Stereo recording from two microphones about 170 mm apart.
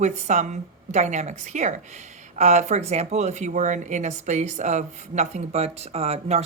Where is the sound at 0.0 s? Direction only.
45° right (ahead or behind).